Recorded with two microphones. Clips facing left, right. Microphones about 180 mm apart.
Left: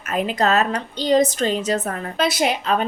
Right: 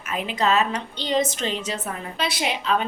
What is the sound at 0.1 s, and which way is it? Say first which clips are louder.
A woman's voice: left 3 dB; 40° left (ahead or behind).